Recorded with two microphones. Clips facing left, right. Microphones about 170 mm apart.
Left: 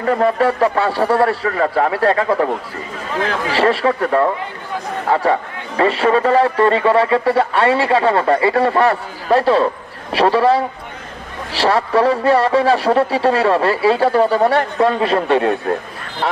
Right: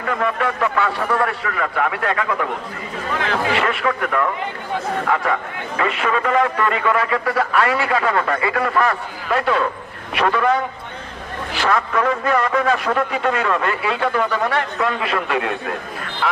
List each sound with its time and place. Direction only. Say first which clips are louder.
0.0 s a man's voice: left 7 dB; 35° left (ahead or behind)